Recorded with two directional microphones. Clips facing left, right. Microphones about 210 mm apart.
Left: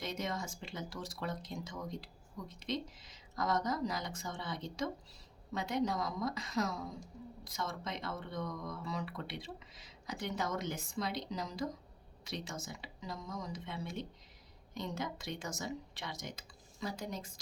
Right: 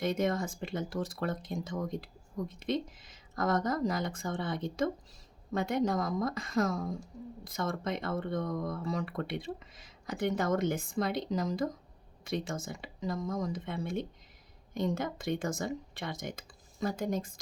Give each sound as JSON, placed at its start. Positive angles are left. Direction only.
{"t": 0.0, "sound": "speech", "side_deg": -55}